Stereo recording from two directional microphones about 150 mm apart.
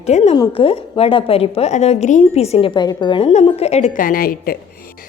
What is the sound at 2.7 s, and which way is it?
Speech, 30° left (ahead or behind).